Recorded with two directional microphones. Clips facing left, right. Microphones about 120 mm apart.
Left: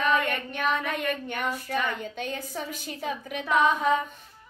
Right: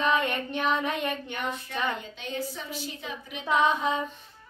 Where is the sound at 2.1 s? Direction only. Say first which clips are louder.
Left 1 dB; 50° left (ahead or behind).